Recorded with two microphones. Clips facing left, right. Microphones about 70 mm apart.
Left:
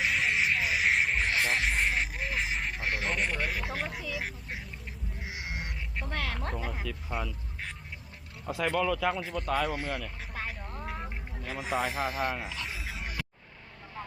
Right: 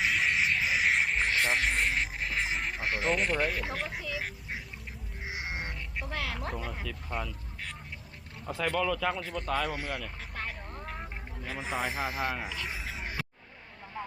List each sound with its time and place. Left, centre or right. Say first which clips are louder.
0.0 s music: even; centre
2.5 s speech: even; centre
5.2 s crow: right 3 dB; right
6.0 s speech: left 1 dB; centre
8.4 s speech: left 1 dB; centre
9.8 s a sound: left 1 dB; centre
11.8 s speech: left 1 dB; centre
12.7 s a sound: right 1 dB; right